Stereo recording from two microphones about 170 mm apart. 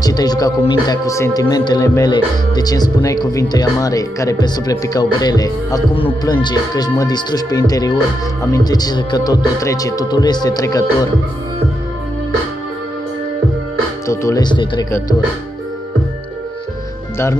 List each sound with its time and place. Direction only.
0.0 s speech: 25° left (ahead or behind)
14.0 s speech: 15° left (ahead or behind)